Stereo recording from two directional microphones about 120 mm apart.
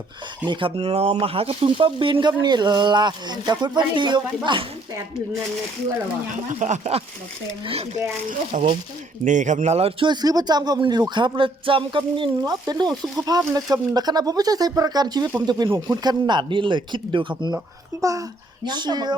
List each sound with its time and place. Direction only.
0.4 s speech: 40° right (ahead or behind)
0.8 s speech: 55° right (ahead or behind); by 4.6 s 40° right (ahead or behind)
6.3 s speech: 85° right
7.6 s speech: 55° right (ahead or behind)
8.5 s speech: 90° right; by 9.9 s 65° right (ahead or behind)
10.0 s speech: 35° right (ahead or behind)
12.4 s speech: 35° right (ahead or behind)
18.0 s speech: 30° right (ahead or behind)